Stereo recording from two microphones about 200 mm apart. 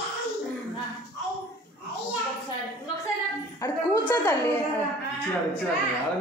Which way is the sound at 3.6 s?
15° left (ahead or behind).